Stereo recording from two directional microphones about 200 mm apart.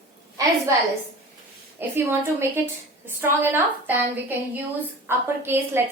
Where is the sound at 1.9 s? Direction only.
10° right (ahead or behind).